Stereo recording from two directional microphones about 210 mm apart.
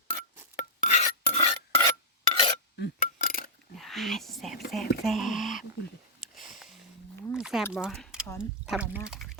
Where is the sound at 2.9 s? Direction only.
45° left (ahead or behind).